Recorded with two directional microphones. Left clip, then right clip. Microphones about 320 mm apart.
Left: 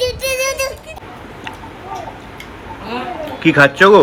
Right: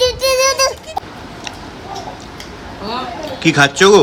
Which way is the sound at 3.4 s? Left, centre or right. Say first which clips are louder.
Left 1 dB; centre.